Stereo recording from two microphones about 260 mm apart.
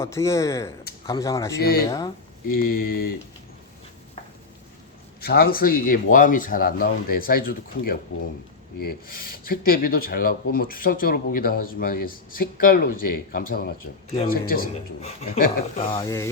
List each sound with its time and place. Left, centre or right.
0.0 s speech: centre
2.5 s speech: left
5.2 s speech: left
9.4 s speech: left
14.1 s speech: left
14.4 s speech: left
15.9 s speech: centre